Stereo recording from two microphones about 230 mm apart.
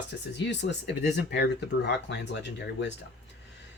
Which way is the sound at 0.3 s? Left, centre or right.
Left.